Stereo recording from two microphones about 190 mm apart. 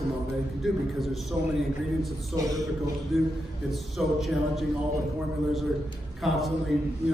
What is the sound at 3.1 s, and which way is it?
A man's voice, centre (ahead or behind).